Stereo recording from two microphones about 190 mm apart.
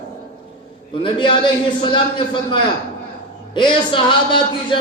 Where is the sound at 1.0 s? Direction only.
25° left (ahead or behind).